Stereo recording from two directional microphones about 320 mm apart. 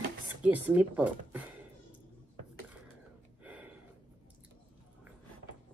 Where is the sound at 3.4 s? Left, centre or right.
Centre.